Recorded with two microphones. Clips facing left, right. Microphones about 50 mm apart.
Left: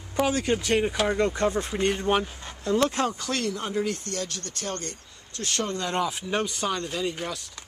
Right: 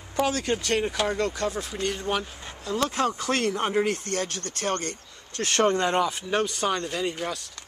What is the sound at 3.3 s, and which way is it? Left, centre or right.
Speech, right.